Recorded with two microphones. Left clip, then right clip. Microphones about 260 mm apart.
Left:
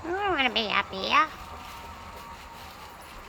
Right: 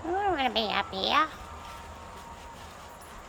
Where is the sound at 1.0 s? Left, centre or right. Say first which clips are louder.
Left 2 dB; centre.